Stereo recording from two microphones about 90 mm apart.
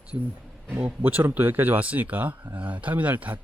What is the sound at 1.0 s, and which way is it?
Speech, 20° right (ahead or behind).